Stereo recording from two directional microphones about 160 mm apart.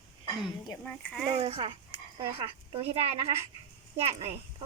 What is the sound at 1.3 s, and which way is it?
Speech, 35° right (ahead or behind).